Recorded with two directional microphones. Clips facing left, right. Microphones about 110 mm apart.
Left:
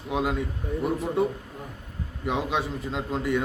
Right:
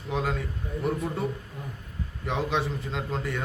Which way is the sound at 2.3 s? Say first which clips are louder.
Left 1 dB; 5° left (ahead or behind).